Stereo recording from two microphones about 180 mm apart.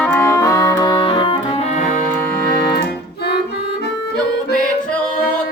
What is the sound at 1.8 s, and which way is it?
Music, 45° left (ahead or behind).